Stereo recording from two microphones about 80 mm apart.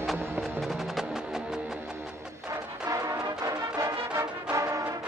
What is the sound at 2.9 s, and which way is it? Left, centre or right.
Music, right.